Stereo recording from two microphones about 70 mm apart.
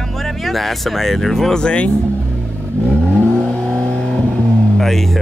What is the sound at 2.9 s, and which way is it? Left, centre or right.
Vehicle, centre.